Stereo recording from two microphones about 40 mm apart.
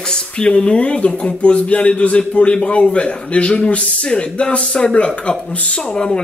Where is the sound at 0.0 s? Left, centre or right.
Left.